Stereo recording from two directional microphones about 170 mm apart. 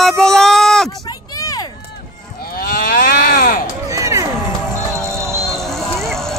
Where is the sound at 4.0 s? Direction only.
20° right (ahead or behind).